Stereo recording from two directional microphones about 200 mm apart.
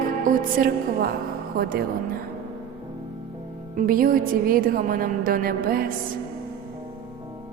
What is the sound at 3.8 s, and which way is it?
Music, 45° right (ahead or behind).